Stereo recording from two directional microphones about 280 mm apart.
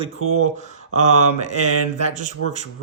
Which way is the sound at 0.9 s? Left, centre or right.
Right.